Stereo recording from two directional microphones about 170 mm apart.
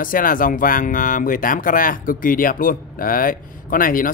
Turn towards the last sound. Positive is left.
turn(degrees=55)  # may be behind; listen again after turning